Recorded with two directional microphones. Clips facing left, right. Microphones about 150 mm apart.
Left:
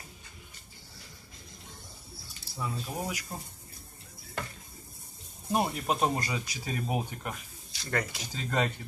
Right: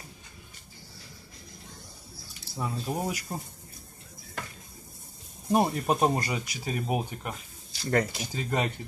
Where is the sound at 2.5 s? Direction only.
30° right (ahead or behind).